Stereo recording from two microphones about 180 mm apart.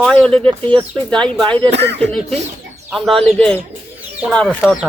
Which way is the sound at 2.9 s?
Centre (ahead or behind).